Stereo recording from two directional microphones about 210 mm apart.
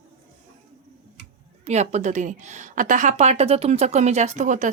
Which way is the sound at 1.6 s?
30° right (ahead or behind).